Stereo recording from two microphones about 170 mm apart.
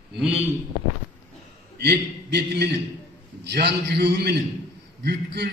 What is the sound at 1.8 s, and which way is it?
A man's voice, 75° right (ahead or behind).